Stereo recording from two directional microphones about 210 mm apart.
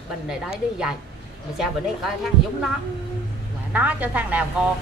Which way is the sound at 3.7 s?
5° right (ahead or behind).